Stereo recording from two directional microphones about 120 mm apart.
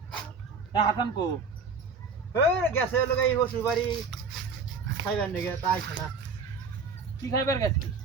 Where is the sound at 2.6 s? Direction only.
15° left (ahead or behind).